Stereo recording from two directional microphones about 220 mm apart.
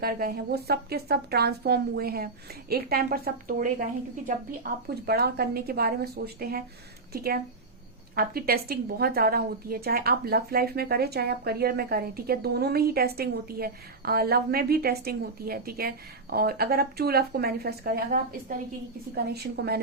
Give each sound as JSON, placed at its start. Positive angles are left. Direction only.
{"t": 0.0, "sound": "a woman's voice", "side_deg": -45}